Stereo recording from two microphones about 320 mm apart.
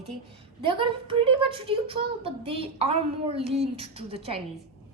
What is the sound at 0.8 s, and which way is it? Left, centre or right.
A woman's voice, centre.